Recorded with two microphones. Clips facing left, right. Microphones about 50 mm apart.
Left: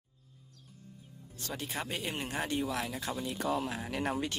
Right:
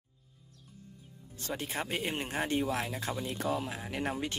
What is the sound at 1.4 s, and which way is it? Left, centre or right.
Speech, right.